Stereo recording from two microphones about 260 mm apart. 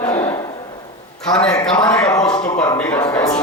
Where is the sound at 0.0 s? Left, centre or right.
Centre.